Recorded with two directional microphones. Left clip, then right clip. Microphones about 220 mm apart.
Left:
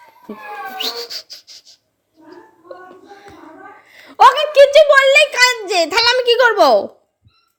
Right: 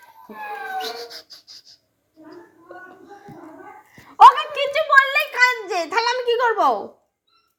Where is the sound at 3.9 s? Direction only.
50° left (ahead or behind).